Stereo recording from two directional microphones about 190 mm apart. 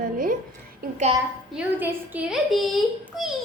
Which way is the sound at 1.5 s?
5° right (ahead or behind).